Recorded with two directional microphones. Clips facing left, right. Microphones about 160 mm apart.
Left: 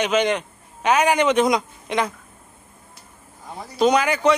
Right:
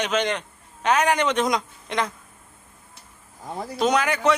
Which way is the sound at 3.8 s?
Centre (ahead or behind).